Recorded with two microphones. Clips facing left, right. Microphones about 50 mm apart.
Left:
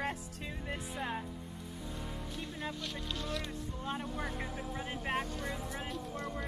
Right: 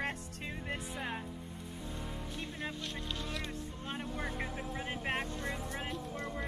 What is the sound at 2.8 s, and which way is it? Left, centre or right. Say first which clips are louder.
Speech: left 1 dB; centre.